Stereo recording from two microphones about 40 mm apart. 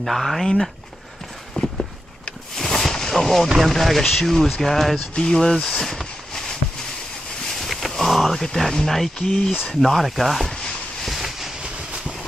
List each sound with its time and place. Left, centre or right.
0.0 s speech: centre
1.5 s clip-clop: centre
2.5 s a sound: centre
3.5 s speech: centre
5.1 s speech: centre
7.4 s a sound: centre
8.4 s speech: centre
9.3 s speech: centre
11.1 s a sound: centre
11.6 s vehicle: centre